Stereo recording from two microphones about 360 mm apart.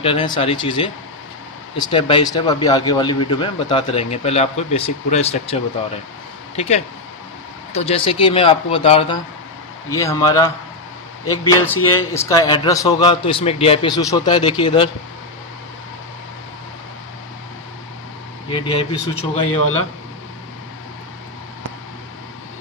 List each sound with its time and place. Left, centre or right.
0.0 s speech: centre
18.5 s speech: centre